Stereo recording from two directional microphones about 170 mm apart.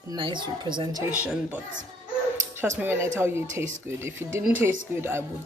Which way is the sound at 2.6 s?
10° right (ahead or behind).